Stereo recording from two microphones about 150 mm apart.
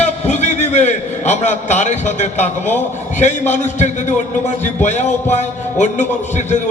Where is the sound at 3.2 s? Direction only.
50° left (ahead or behind).